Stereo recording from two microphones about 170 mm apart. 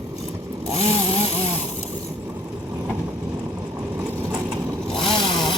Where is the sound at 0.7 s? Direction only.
40° left (ahead or behind).